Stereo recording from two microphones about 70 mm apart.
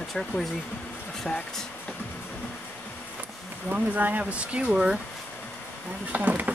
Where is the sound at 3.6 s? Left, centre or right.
Right.